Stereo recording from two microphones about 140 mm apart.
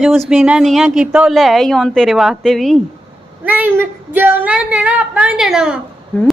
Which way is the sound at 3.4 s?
10° right (ahead or behind).